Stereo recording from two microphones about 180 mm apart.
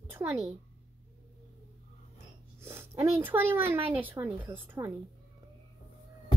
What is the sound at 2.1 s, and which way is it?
A child's voice, 15° right (ahead or behind).